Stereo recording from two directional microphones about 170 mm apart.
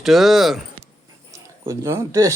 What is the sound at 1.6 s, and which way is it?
Speech, 15° right (ahead or behind).